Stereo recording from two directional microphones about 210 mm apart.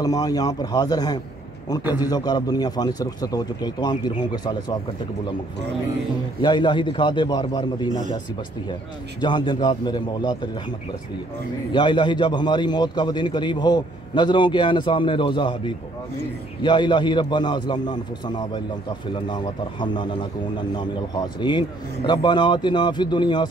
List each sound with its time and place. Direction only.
0.0 s a man's voice: 15° left (ahead or behind)
6.4 s a man's voice: 20° left (ahead or behind)
9.2 s a man's voice: 20° left (ahead or behind)
11.7 s a man's voice: 20° left (ahead or behind)